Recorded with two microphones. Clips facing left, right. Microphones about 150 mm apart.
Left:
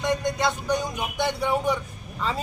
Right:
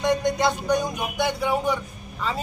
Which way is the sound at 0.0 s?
20° right (ahead or behind).